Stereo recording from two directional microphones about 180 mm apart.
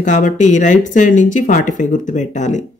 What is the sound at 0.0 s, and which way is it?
Speech, 45° left (ahead or behind).